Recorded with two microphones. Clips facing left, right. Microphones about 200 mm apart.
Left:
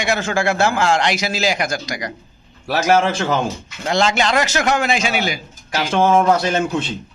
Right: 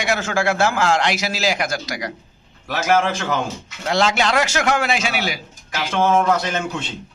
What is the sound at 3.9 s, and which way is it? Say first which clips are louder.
A man's voice: left 1 dB; 5° right (ahead or behind).